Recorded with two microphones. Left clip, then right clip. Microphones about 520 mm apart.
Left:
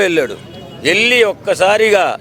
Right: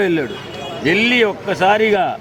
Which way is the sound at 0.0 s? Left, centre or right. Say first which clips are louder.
Left 4 dB; left.